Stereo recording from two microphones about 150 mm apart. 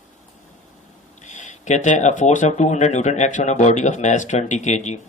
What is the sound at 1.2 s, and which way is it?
Speech, 55° left (ahead or behind).